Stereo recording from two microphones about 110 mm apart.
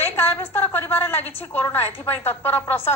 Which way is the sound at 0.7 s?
20° left (ahead or behind).